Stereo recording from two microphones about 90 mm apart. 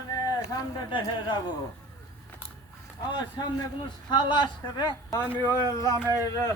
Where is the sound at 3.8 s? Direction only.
55° left (ahead or behind).